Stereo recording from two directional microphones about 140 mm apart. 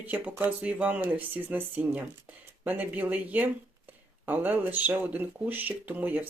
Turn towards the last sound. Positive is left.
turn(degrees=-10)  # may be behind; listen again after turning